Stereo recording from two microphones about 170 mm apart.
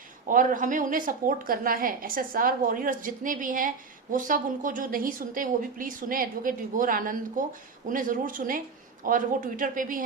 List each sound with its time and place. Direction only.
0.3 s a woman's voice: 50° right (ahead or behind)